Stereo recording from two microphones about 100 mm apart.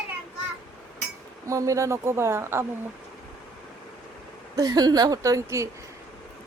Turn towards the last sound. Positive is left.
turn(degrees=-30)  # may be behind; listen again after turning